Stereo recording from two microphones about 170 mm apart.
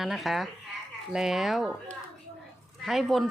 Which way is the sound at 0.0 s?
Centre (ahead or behind).